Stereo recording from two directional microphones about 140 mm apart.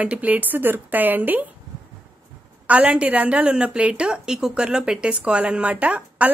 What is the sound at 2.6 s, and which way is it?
A woman's voice, 10° right (ahead or behind).